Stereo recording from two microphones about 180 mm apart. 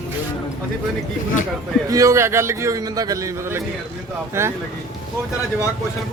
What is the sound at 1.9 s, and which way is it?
A man's voice, 20° right (ahead or behind).